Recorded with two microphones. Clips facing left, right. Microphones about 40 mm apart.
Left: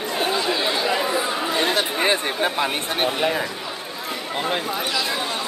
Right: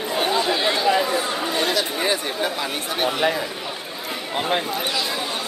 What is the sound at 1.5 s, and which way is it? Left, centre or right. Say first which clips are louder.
Speech: left 1 dB; left.